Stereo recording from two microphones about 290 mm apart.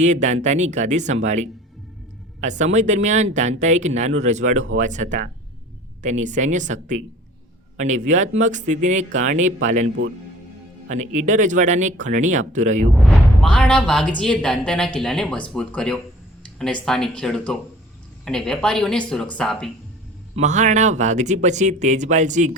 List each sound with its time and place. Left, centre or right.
0.0 s speech: right
13.1 s a woman's voice: centre
20.3 s speech: right